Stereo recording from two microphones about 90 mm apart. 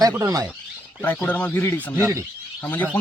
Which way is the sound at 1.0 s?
20° left (ahead or behind).